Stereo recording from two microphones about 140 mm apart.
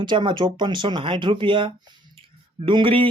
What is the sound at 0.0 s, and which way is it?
Speech, 35° right (ahead or behind).